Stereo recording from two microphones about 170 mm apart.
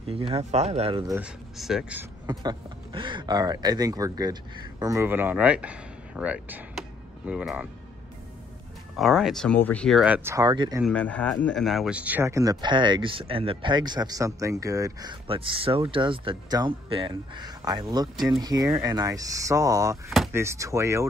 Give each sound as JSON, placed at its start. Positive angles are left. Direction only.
{"t": 0.1, "sound": "speech", "side_deg": -35}
{"t": 1.0, "sound": "speech", "side_deg": -15}
{"t": 1.6, "sound": "speech", "side_deg": -5}
{"t": 2.2, "sound": "speech", "side_deg": -25}
{"t": 8.9, "sound": "speech", "side_deg": 0}
{"t": 10.3, "sound": "speech", "side_deg": -25}
{"t": 10.9, "sound": "speech", "side_deg": 10}